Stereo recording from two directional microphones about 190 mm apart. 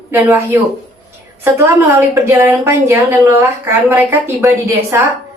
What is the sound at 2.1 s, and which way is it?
A woman's voice, 10° right (ahead or behind).